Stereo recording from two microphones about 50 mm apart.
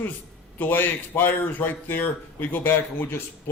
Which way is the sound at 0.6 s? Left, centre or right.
Left.